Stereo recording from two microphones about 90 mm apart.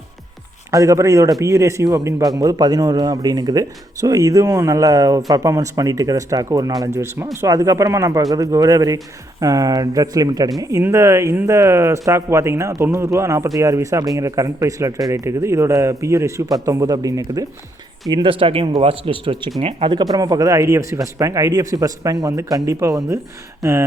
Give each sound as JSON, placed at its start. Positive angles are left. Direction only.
{"t": 0.7, "sound": "speech", "side_deg": -35}
{"t": 18.1, "sound": "speech", "side_deg": -80}
{"t": 20.1, "sound": "speech", "side_deg": -45}